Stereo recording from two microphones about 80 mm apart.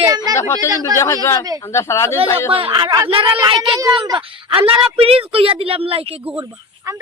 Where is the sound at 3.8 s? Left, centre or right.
Right.